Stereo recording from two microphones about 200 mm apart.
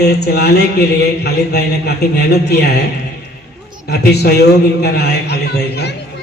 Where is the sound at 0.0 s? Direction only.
55° left (ahead or behind).